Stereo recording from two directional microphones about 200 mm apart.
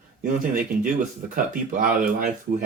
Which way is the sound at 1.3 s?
40° right (ahead or behind).